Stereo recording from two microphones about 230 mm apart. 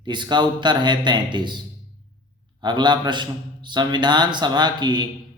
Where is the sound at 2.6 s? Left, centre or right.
Centre.